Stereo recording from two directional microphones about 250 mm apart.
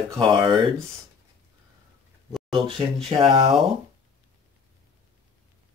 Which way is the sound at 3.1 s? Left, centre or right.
Centre.